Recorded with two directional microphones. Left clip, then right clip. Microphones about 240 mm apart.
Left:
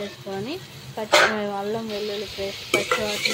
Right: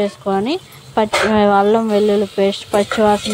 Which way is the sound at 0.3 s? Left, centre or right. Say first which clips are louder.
Right 13 dB; right.